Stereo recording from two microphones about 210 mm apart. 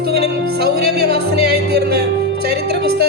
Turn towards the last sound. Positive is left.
turn(degrees=-50)  # may be behind; listen again after turning